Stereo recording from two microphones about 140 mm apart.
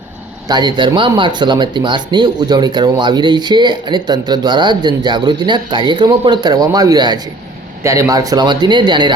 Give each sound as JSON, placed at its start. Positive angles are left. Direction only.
{"t": 0.4, "sound": "speech", "side_deg": -30}